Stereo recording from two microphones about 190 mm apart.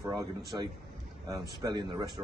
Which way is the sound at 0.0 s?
20° right (ahead or behind).